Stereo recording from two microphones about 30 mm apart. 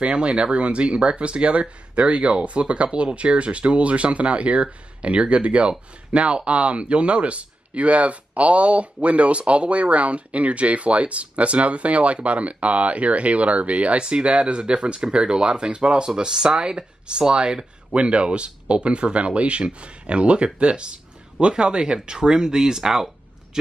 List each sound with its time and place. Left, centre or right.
0.0 s speech: right
18.0 s speech: right; by 23.0 s centre
23.5 s a sound: right